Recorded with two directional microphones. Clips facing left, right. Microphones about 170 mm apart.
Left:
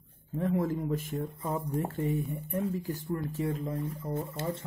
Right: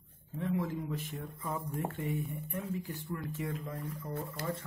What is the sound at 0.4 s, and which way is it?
Speech, 45° left (ahead or behind).